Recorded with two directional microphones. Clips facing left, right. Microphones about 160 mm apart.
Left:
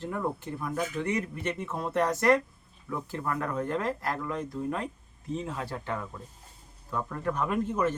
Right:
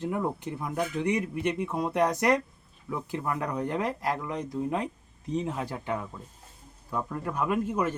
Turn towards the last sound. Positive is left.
turn(degrees=-10)  # may be behind; listen again after turning